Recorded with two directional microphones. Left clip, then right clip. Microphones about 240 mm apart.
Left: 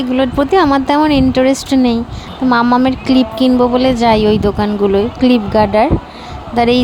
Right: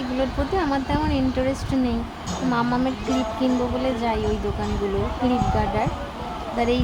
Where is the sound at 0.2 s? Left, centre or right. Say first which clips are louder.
Left 13 dB; left.